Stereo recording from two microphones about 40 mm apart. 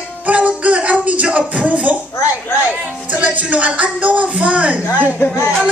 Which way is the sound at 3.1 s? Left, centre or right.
Right.